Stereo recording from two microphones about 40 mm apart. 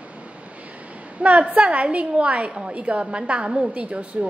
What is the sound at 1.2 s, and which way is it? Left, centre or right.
A woman's voice, right.